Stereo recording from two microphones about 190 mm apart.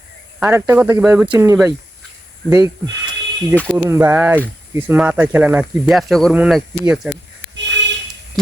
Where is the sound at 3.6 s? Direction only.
10° right (ahead or behind).